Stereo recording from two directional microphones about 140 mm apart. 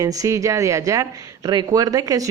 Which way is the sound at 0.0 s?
25° right (ahead or behind).